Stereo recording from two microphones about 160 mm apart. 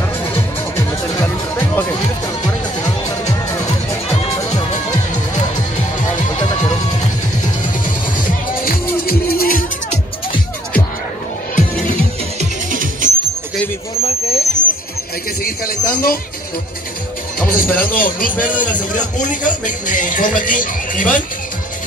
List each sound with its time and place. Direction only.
0.3 s music: 15° left (ahead or behind)
7.6 s music: 60° left (ahead or behind)
12.4 s music: 55° right (ahead or behind)
14.0 s a sound: 40° left (ahead or behind)
15.6 s a sound: 70° left (ahead or behind)
17.6 s a man's voice: 60° left (ahead or behind)